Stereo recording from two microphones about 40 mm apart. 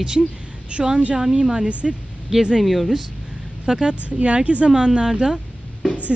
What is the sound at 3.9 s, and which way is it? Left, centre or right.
Speech, right.